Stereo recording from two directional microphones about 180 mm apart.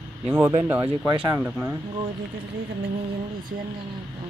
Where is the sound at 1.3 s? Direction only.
10° right (ahead or behind).